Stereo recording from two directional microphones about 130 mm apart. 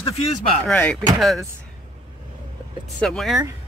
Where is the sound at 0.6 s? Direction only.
10° left (ahead or behind).